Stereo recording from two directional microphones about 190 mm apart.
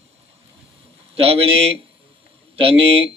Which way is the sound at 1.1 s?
30° right (ahead or behind).